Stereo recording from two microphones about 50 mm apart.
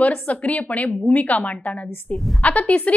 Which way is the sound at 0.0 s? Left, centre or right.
Left.